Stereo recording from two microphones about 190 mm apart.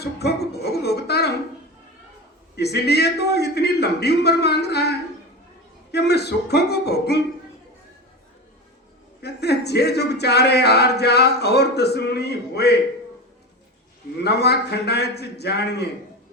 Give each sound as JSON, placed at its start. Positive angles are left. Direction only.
{"t": 0.0, "sound": "music", "side_deg": 60}
{"t": 2.6, "sound": "speech", "side_deg": 60}
{"t": 9.2, "sound": "speech", "side_deg": 60}
{"t": 14.2, "sound": "speech", "side_deg": 60}